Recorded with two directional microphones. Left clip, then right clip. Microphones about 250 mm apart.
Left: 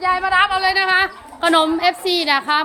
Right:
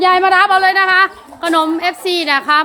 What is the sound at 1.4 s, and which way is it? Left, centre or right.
A woman's voice, centre.